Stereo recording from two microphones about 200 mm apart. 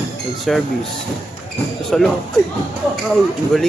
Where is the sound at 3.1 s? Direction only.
Centre (ahead or behind).